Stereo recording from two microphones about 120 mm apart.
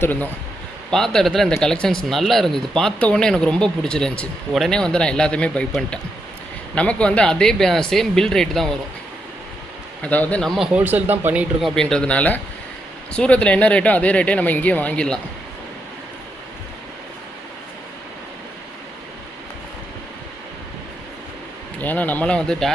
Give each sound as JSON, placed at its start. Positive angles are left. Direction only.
{"t": 0.0, "sound": "speech", "side_deg": 15}
{"t": 0.9, "sound": "speech", "side_deg": 5}
{"t": 10.0, "sound": "speech", "side_deg": 10}
{"t": 10.7, "sound": "speech", "side_deg": -10}
{"t": 11.6, "sound": "speech", "side_deg": 5}
{"t": 21.8, "sound": "speech", "side_deg": 15}